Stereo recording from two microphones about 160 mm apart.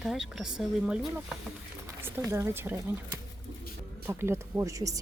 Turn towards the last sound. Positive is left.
turn(degrees=-20)  # may be behind; listen again after turning